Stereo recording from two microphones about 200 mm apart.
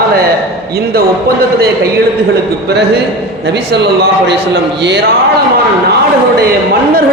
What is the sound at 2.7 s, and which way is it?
A man's voice, 55° right (ahead or behind).